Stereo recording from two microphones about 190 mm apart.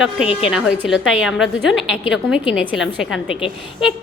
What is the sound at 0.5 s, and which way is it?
A woman's voice, 5° right (ahead or behind).